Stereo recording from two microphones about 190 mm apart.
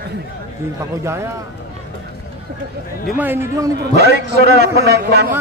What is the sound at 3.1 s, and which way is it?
Speech, 10° right (ahead or behind).